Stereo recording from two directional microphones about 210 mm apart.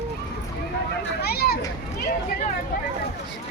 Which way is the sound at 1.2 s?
50° left (ahead or behind).